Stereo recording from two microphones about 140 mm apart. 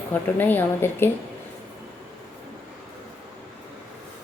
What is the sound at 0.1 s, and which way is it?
Speech, 15° left (ahead or behind).